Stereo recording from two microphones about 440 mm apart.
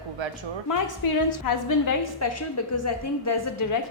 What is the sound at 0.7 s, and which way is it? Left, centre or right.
A woman's voice, left.